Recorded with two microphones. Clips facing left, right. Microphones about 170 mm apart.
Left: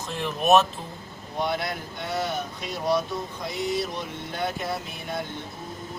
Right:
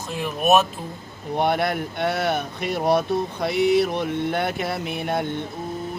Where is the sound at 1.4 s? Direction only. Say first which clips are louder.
Right 6 dB; 60° right (ahead or behind).